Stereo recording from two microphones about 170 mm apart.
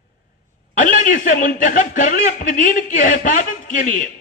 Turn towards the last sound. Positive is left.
turn(degrees=50)  # may be behind; listen again after turning